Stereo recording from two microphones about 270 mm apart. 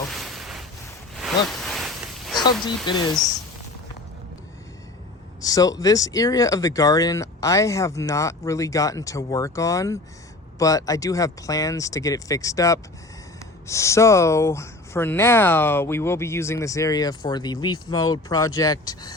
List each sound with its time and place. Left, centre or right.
0.1 s boat: centre
1.1 s a sound: centre
2.4 s speech: centre
5.4 s speech: centre